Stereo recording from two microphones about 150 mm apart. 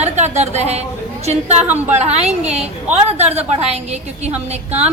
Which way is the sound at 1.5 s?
10° right (ahead or behind).